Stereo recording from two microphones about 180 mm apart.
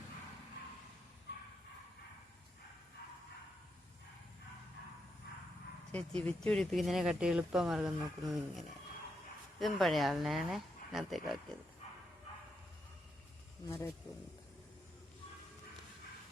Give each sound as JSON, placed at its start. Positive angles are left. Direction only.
{"t": 5.9, "sound": "speech", "side_deg": 5}
{"t": 13.7, "sound": "speech", "side_deg": 20}